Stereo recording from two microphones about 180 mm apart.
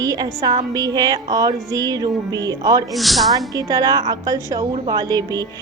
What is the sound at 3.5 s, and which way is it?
A woman's voice, 20° right (ahead or behind).